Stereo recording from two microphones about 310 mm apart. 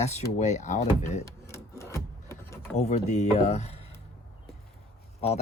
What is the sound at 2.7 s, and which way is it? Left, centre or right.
Speech, left.